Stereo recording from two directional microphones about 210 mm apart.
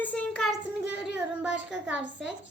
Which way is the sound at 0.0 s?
5° left (ahead or behind).